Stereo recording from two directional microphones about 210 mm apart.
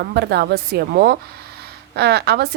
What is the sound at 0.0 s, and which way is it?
Speech, 55° right (ahead or behind).